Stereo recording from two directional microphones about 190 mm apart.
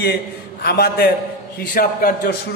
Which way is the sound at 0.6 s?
55° left (ahead or behind).